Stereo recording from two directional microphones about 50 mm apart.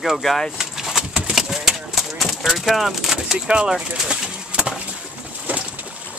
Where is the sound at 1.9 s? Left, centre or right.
Centre.